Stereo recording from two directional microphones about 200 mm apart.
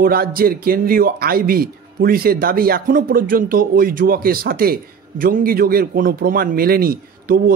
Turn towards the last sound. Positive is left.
turn(degrees=-45)  # may be behind; listen again after turning